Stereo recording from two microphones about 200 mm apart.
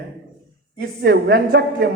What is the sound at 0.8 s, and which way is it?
Speech, 50° right (ahead or behind).